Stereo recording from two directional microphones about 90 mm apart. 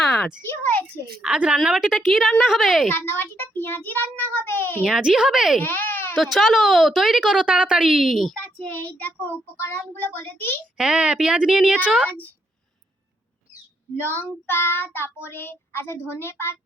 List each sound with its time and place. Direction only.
0.0 s a sound: 5° left (ahead or behind)
0.5 s a sound: 20° left (ahead or behind)
1.2 s a woman's voice: 15° right (ahead or behind)
2.9 s child singing: 25° left (ahead or behind)
4.8 s a woman's voice: 10° right (ahead or behind)
5.5 s baby cry: 20° left (ahead or behind)
6.3 s a woman's voice: centre (ahead or behind)
8.9 s child singing: 20° left (ahead or behind)
10.8 s a woman's voice: 10° right (ahead or behind)
13.9 s child singing: 20° left (ahead or behind)